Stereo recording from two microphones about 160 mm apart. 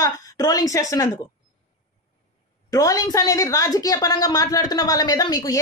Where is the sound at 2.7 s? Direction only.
20° left (ahead or behind).